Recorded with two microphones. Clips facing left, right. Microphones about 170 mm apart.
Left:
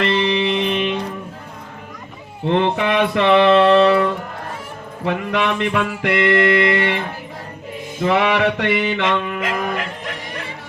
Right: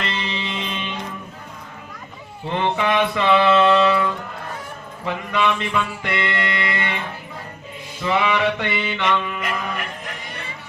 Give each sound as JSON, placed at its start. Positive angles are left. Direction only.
{"t": 0.0, "sound": "music", "side_deg": 65}
{"t": 2.5, "sound": "mantra", "side_deg": 60}
{"t": 5.0, "sound": "music", "side_deg": 60}
{"t": 7.9, "sound": "music", "side_deg": 55}
{"t": 9.6, "sound": "music", "side_deg": 90}